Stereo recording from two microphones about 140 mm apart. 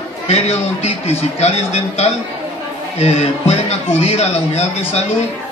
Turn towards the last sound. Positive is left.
turn(degrees=45)  # may be behind; listen again after turning